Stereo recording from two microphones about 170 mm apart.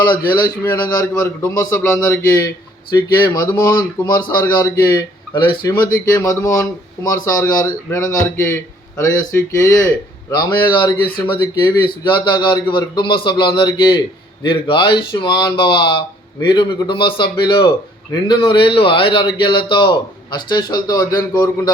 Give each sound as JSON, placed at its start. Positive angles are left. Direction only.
{"t": 0.1, "sound": "a man's voice", "side_deg": 60}
{"t": 0.3, "sound": "speech", "side_deg": 25}
{"t": 2.9, "sound": "speech", "side_deg": 25}